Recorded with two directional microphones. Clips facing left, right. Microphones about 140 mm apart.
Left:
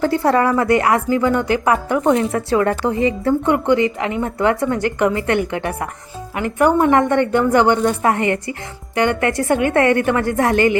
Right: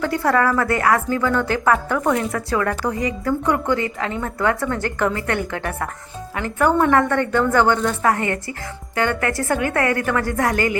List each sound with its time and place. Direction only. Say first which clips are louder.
0.0 s speech: left 3 dB; 25° left (ahead or behind)